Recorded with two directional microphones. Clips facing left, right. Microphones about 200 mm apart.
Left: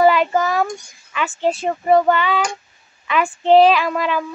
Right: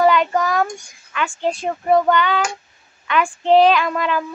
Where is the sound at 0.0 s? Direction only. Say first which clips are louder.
Left 1 dB; 5° left (ahead or behind).